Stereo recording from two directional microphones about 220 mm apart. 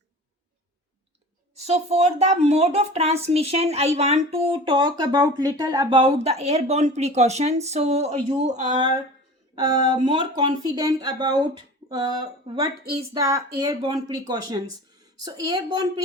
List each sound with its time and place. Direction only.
1.5 s speech: 30° right (ahead or behind)
8.6 s speech: 20° right (ahead or behind)